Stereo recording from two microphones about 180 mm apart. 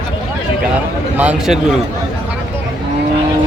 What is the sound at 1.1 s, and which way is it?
Speech, 5° right (ahead or behind).